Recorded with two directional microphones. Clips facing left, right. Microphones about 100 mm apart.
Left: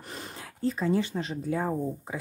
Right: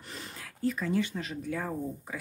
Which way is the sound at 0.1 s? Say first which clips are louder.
Left 3 dB; 25° left (ahead or behind).